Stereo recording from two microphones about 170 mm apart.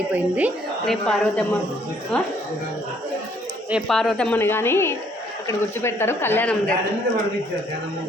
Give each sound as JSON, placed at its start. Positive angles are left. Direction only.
{"t": 0.1, "sound": "a woman's voice", "side_deg": -10}
{"t": 0.9, "sound": "a man's voice", "side_deg": 5}
{"t": 3.7, "sound": "speech", "side_deg": 0}